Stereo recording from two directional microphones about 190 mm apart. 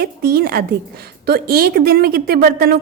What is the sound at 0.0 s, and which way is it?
A woman's voice, 55° right (ahead or behind).